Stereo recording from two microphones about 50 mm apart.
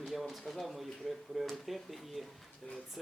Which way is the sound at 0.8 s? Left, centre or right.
Centre.